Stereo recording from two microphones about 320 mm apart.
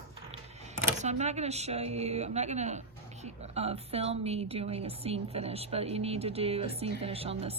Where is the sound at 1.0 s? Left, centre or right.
Right.